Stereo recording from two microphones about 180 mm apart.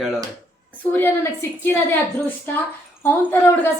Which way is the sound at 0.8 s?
10° left (ahead or behind).